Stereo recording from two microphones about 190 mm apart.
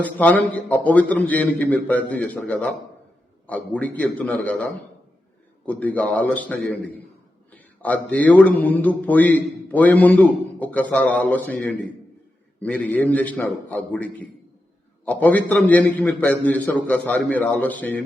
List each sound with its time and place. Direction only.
0.0 s a man's voice: 10° left (ahead or behind)